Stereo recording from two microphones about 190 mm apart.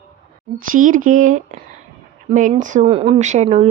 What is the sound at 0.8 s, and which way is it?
Speech, 45° right (ahead or behind).